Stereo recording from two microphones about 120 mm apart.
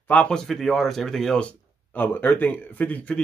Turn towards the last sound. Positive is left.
turn(degrees=10)  # may be behind; listen again after turning